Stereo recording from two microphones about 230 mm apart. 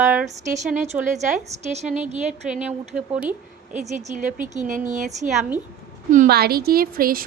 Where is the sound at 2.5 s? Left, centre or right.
Centre.